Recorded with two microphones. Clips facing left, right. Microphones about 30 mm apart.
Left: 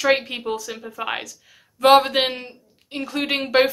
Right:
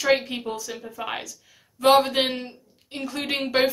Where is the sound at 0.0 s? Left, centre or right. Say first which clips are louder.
Left 2 dB; centre.